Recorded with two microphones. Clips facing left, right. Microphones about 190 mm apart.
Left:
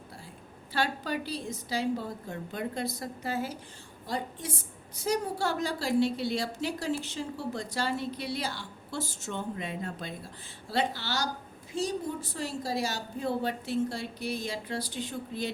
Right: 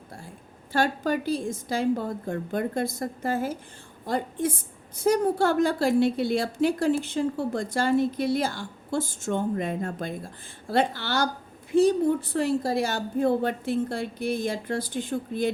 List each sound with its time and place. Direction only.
0.7 s a woman's voice: 45° right (ahead or behind)